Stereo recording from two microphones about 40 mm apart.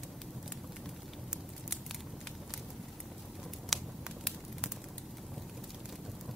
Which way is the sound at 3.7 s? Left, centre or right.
Centre.